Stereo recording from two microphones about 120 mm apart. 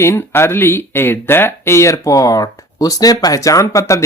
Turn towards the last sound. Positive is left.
turn(degrees=25)  # may be behind; listen again after turning